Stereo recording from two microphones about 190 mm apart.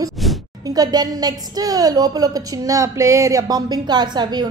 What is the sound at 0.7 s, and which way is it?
A woman's voice, 20° right (ahead or behind).